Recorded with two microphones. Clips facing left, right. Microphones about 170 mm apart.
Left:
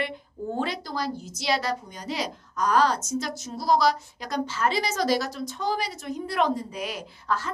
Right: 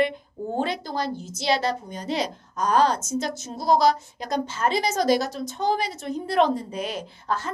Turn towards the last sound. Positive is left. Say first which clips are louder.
# right 1 dB
turn(degrees=-25)  # may be behind; listen again after turning